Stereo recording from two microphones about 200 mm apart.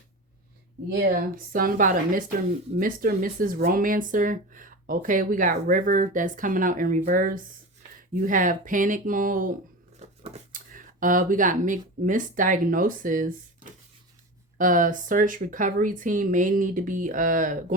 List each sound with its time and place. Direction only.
0.9 s speech: 45° right (ahead or behind)
14.6 s speech: 40° right (ahead or behind)